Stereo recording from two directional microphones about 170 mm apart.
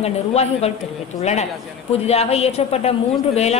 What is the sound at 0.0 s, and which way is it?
A woman's voice, 40° left (ahead or behind).